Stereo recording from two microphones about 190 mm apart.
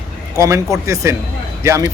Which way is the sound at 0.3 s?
15° right (ahead or behind).